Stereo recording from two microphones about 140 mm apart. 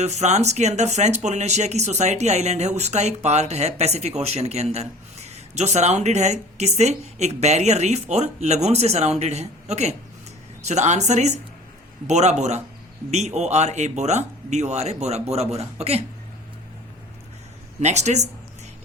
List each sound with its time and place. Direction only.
0.0 s speech: 55° right (ahead or behind)
17.7 s speech: 55° right (ahead or behind)